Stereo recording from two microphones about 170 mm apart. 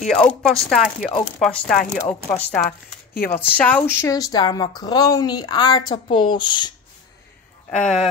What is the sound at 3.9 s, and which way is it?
Speech, 15° left (ahead or behind).